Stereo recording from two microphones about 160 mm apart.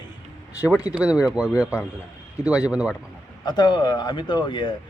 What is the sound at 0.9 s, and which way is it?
Speech, 5° right (ahead or behind).